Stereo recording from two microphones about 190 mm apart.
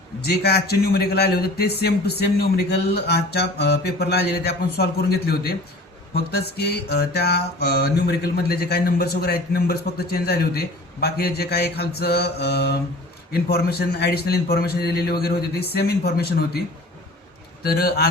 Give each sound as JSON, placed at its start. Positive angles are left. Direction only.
{"t": 0.3, "sound": "mantra", "side_deg": 60}
{"t": 6.6, "sound": "mantra", "side_deg": 60}